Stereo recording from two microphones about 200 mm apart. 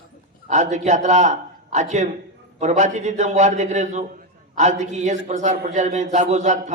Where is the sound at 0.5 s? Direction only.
35° right (ahead or behind).